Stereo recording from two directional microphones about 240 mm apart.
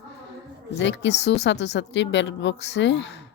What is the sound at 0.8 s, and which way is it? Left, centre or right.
A woman's voice, left.